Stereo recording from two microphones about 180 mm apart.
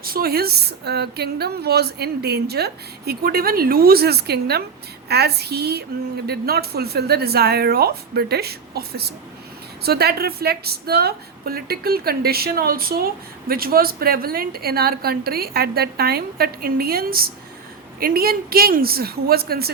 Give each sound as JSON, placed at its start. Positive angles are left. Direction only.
{"t": 0.0, "sound": "speech", "side_deg": -55}